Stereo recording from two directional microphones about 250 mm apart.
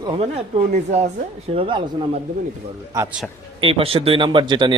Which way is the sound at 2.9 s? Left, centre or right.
Centre.